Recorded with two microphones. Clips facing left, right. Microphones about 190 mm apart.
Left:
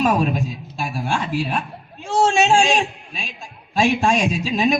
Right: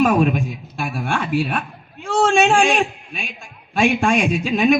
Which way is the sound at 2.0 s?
55° right (ahead or behind).